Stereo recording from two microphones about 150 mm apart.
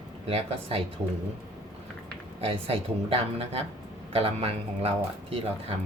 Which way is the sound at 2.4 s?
40° right (ahead or behind).